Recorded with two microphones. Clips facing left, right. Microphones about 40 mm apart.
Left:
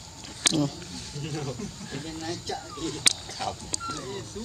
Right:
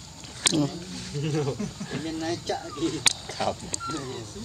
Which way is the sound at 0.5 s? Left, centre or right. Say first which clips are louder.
Right 1 dB; centre.